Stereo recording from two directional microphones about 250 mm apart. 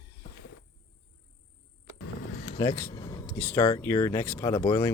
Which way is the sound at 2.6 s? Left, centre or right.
Centre.